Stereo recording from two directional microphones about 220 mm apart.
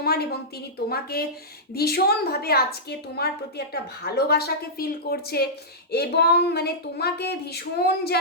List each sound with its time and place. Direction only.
0.0 s speech: 45° left (ahead or behind)